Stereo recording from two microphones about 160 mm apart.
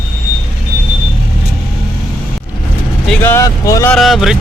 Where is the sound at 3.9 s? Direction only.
Centre (ahead or behind).